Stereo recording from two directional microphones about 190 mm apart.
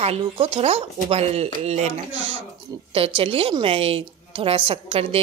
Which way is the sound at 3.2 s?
30° right (ahead or behind).